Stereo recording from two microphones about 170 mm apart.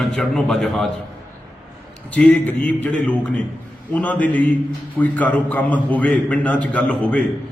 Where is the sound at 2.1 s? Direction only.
5° left (ahead or behind).